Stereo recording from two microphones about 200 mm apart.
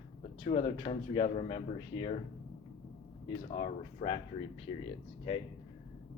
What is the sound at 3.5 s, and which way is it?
Speech, 25° left (ahead or behind).